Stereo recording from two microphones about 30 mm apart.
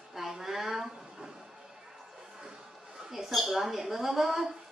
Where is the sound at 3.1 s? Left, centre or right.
Centre.